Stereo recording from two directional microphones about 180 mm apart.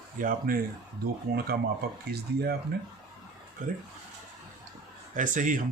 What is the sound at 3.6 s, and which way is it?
Speech, 50° right (ahead or behind).